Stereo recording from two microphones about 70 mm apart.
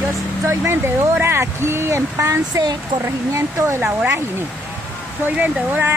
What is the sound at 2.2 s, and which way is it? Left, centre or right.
Speech, right.